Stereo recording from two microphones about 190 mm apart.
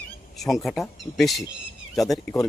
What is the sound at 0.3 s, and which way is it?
Speech, centre (ahead or behind).